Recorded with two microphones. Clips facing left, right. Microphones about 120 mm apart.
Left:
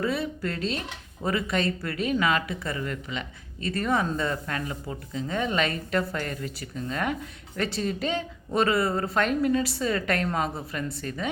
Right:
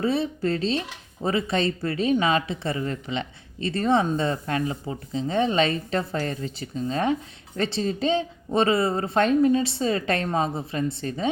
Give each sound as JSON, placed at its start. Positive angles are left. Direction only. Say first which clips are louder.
{"t": 0.0, "sound": "a woman's voice", "louder": "right 4 dB", "side_deg": -25}